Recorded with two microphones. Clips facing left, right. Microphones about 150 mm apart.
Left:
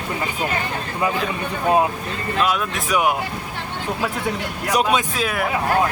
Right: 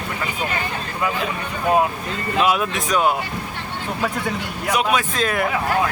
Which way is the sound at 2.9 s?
15° left (ahead or behind).